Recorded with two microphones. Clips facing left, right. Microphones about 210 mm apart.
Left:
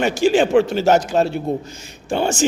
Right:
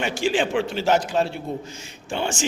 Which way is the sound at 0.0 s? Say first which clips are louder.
Left 7 dB; 40° left (ahead or behind).